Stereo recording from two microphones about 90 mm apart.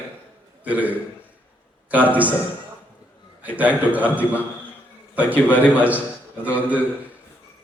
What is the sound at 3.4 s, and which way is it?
A man's voice, 15° right (ahead or behind).